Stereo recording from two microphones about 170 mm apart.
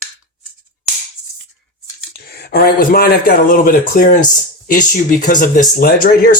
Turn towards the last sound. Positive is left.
turn(degrees=55)  # may be behind; listen again after turning